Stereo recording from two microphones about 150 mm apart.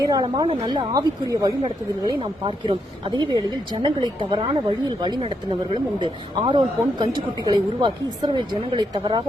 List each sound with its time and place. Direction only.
0.0 s speech: 25° right (ahead or behind)